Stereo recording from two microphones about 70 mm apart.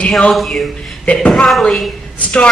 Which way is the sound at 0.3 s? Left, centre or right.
Centre.